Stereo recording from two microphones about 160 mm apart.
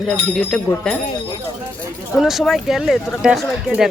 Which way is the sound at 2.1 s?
Centre (ahead or behind).